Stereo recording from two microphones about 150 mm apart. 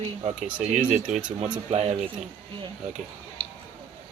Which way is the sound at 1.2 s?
10° right (ahead or behind).